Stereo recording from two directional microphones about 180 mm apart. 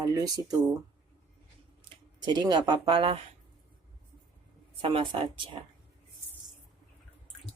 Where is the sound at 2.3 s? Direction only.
25° right (ahead or behind).